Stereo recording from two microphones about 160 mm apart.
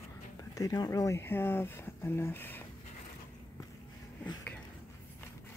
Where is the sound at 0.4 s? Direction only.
20° left (ahead or behind).